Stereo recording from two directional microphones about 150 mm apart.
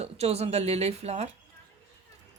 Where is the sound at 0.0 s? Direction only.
45° right (ahead or behind).